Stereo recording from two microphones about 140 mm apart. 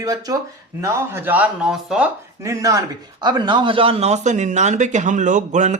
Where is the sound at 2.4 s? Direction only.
25° right (ahead or behind).